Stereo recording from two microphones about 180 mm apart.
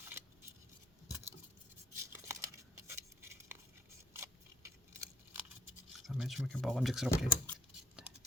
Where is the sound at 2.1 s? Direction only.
15° right (ahead or behind).